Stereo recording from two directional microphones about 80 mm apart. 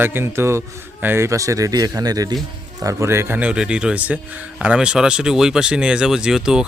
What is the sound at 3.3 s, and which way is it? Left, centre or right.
Speech, centre.